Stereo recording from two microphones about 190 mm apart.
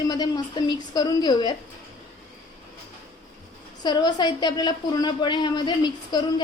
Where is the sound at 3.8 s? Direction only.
25° left (ahead or behind).